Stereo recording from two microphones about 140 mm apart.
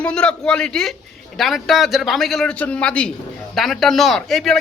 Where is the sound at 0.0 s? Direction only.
5° left (ahead or behind).